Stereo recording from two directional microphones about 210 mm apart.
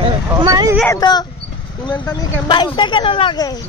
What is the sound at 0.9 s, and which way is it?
Speech, 20° left (ahead or behind).